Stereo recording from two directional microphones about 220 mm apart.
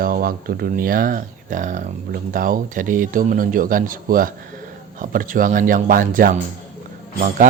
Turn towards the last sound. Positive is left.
turn(degrees=-35)  # may be behind; listen again after turning